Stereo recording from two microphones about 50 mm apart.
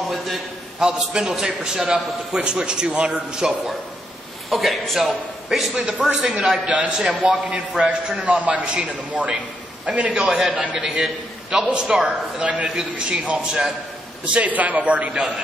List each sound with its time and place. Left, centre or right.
0.7 s a man's voice: centre
4.5 s a man's voice: centre
6.2 s a man's voice: centre
10.2 s a man's voice: centre
10.5 s a man's voice: right
14.2 s a man's voice: right